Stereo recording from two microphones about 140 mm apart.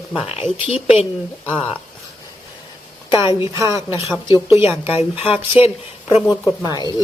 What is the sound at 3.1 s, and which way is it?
Speech, 35° left (ahead or behind).